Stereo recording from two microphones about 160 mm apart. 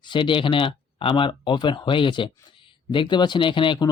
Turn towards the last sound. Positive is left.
turn(degrees=30)  # may be behind; listen again after turning